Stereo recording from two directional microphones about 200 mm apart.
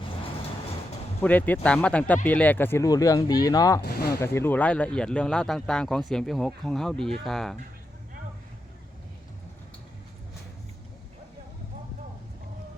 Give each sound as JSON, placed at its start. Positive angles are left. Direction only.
{"t": 1.2, "sound": "speech", "side_deg": 10}
{"t": 3.8, "sound": "a sound", "side_deg": 50}
{"t": 4.2, "sound": "speech", "side_deg": 10}